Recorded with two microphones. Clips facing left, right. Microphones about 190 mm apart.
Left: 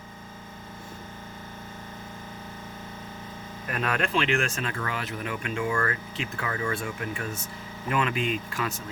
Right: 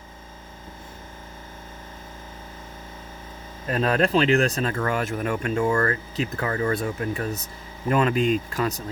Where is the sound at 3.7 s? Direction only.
30° right (ahead or behind).